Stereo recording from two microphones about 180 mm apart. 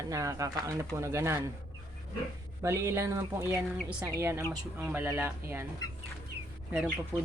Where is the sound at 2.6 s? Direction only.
15° right (ahead or behind).